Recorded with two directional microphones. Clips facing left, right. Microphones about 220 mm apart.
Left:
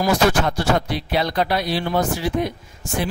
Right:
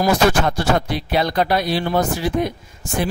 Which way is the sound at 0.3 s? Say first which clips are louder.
Right 1 dB; 45° right (ahead or behind).